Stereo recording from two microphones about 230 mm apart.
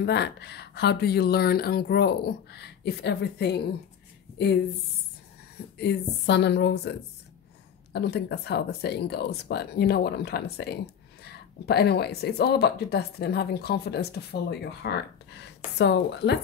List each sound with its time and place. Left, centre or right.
0.0 s speech: left
5.8 s speech: left